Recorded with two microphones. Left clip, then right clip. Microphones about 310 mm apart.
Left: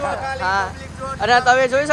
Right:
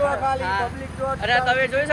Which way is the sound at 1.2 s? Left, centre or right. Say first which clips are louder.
Left 6 dB; left.